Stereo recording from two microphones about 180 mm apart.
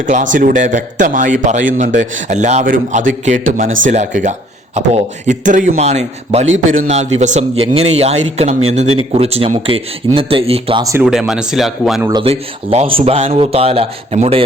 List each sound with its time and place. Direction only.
0.0 s a man's voice: 45° right (ahead or behind)
11.0 s speech: 5° right (ahead or behind)
12.2 s speech: 35° right (ahead or behind)